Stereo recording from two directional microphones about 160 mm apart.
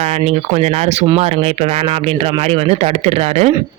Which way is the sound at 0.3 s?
40° right (ahead or behind).